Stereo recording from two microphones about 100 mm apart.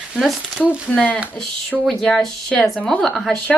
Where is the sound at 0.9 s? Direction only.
15° left (ahead or behind).